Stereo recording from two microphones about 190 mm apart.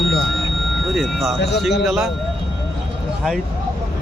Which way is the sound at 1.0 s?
Centre (ahead or behind).